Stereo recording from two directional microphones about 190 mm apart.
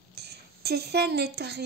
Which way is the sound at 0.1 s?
60° right (ahead or behind).